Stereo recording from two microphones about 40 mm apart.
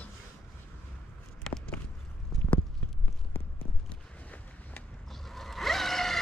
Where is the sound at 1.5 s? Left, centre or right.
Centre.